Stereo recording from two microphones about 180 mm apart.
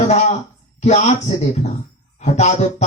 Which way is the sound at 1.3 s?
35° left (ahead or behind).